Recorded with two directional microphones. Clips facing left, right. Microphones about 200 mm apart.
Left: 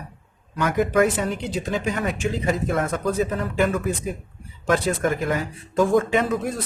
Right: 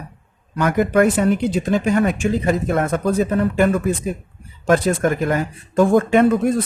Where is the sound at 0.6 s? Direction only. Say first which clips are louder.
Right 4 dB; 55° right (ahead or behind).